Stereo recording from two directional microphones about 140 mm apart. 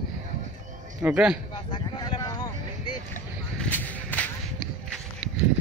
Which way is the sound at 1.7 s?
30° left (ahead or behind).